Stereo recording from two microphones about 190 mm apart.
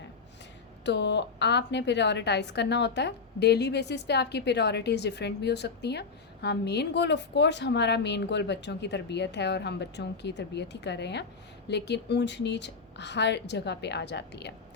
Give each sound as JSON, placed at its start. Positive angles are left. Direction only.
{"t": 0.9, "sound": "a woman's voice", "side_deg": 65}